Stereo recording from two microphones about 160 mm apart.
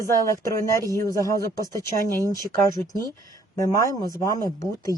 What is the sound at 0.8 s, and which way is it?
Speech, 20° right (ahead or behind).